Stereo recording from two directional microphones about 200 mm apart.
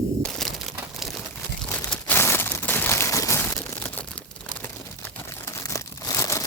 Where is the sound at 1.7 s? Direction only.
10° left (ahead or behind).